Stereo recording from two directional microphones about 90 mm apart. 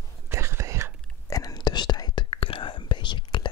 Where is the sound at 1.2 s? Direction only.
40° left (ahead or behind).